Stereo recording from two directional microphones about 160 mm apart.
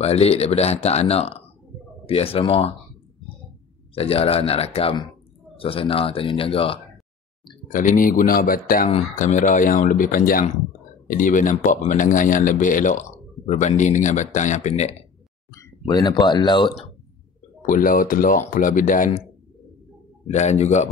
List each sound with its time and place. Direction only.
0.0 s speech: 40° left (ahead or behind)
3.9 s speech: 35° left (ahead or behind)
7.7 s speech: 55° left (ahead or behind)
15.9 s speech: 25° left (ahead or behind)
17.6 s speech: 55° left (ahead or behind)
20.2 s speech: 45° left (ahead or behind)